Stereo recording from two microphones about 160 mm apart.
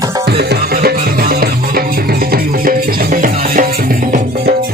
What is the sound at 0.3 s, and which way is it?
Music, 90° right.